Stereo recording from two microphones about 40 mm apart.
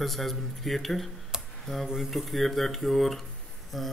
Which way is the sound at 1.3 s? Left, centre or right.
Centre.